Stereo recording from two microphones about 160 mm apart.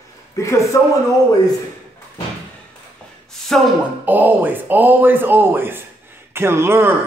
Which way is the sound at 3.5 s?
5° left (ahead or behind).